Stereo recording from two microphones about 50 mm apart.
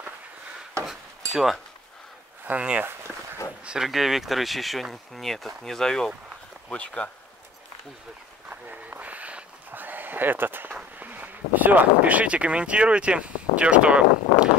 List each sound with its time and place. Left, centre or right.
0.8 s cutlery: centre
2.5 s speech: right
3.1 s a sound: centre
3.6 s speech: centre
6.7 s speech: left
9.0 s a sound: right
11.0 s speech: right